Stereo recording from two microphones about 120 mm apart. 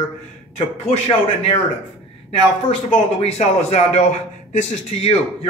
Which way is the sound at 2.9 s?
60° left (ahead or behind).